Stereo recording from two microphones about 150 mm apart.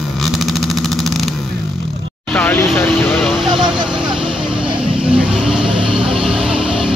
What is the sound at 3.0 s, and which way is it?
Vehicle, centre (ahead or behind).